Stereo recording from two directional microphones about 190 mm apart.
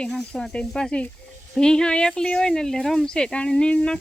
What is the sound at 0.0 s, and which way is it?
Speech, 5° left (ahead or behind).